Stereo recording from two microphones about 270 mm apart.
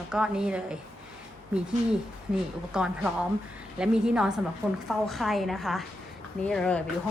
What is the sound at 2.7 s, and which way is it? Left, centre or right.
A woman's voice, centre.